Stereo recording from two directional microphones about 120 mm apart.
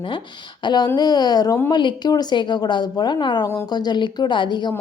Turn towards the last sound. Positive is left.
turn(degrees=40)  # may be behind; listen again after turning